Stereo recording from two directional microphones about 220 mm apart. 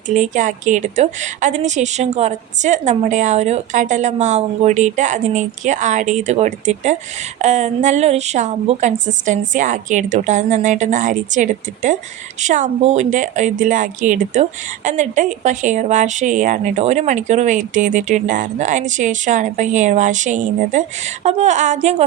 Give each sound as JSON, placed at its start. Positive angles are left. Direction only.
{"t": 0.1, "sound": "speech", "side_deg": -35}